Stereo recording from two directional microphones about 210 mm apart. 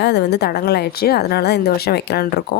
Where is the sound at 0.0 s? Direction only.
55° left (ahead or behind).